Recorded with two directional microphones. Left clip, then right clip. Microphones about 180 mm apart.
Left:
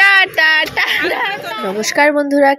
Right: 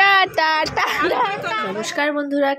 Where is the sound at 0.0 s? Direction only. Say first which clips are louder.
Left 5 dB; 15° right (ahead or behind).